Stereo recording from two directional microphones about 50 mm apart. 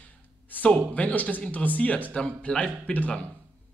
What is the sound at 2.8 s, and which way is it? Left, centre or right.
Speech, left.